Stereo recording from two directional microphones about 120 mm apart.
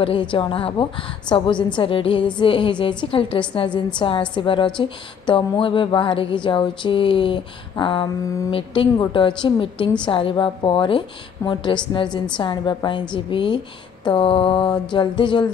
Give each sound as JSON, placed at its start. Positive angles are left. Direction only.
{"t": 0.0, "sound": "a woman's voice", "side_deg": 45}